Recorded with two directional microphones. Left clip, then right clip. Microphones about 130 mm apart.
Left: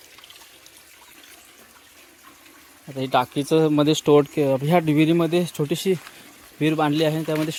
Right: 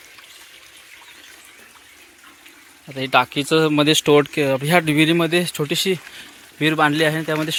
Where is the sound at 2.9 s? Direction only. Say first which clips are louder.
Right 4 dB; 20° left (ahead or behind).